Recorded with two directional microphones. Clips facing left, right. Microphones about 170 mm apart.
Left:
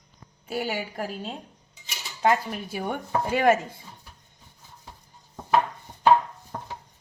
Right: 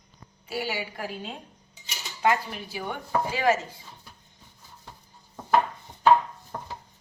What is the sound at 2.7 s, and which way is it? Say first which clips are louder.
Speech: left 4 dB; 45° left (ahead or behind).